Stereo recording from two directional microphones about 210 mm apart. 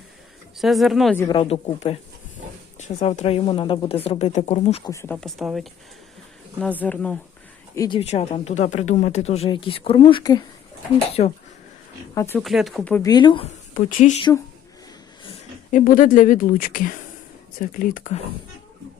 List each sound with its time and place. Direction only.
0.6 s speech: centre (ahead or behind)
1.1 s speech: 10° left (ahead or behind)
1.4 s speech: 30° left (ahead or behind)
4.9 s speech: 15° left (ahead or behind)
5.1 s speech: centre (ahead or behind)
7.8 s speech: 25° left (ahead or behind)
12.1 s speech: 10° left (ahead or behind)
12.4 s speech: centre (ahead or behind)
13.1 s speech: 20° left (ahead or behind)
13.7 s speech: 35° left (ahead or behind)
15.7 s speech: 40° left (ahead or behind)